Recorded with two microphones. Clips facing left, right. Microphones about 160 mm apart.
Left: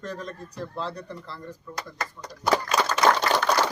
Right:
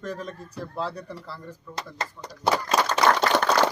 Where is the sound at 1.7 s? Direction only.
25° right (ahead or behind).